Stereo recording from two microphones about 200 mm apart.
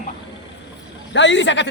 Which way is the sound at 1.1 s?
65° left (ahead or behind).